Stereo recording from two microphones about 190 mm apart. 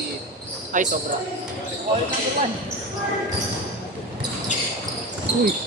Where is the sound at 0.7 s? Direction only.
40° right (ahead or behind).